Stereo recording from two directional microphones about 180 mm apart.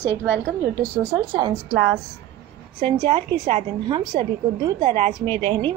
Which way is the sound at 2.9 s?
25° right (ahead or behind).